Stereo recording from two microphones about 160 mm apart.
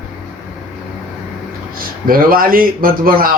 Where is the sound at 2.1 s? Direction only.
65° right (ahead or behind).